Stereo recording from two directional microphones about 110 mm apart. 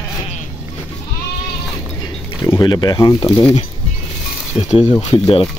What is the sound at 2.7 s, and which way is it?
Speech, 40° left (ahead or behind).